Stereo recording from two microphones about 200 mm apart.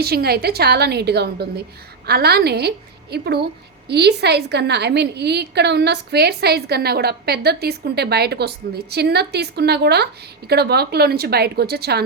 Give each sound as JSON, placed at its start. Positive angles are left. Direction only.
{"t": 0.0, "sound": "a woman's voice", "side_deg": -50}